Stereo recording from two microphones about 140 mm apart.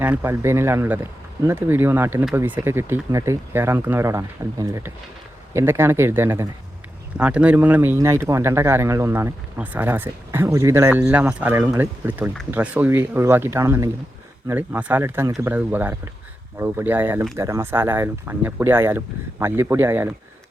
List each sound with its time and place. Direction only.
0.0 s speech: 15° right (ahead or behind)